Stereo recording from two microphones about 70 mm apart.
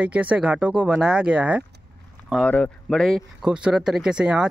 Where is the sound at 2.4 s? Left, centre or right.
Left.